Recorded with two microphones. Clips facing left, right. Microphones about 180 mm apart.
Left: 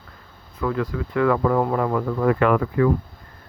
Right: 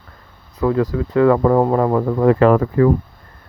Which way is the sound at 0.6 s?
35° right (ahead or behind).